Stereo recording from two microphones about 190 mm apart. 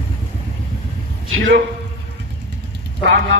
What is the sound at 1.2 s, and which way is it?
Speech, 85° right.